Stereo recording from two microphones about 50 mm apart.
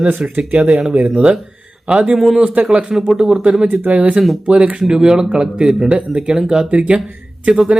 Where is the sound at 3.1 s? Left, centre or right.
Centre.